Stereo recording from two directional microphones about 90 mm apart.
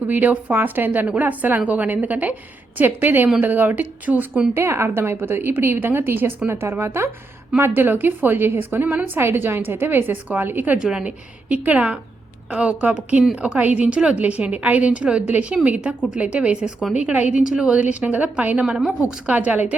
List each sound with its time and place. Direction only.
0.1 s a woman's voice: 20° right (ahead or behind)
10.8 s a woman's voice: 10° right (ahead or behind)